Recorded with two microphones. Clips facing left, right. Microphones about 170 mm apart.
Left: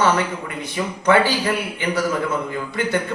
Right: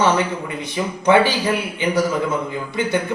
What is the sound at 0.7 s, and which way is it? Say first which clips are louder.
A man's voice: right 2 dB; 15° right (ahead or behind).